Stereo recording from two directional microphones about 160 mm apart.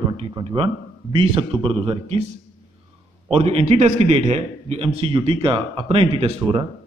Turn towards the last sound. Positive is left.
turn(degrees=-35)  # may be behind; listen again after turning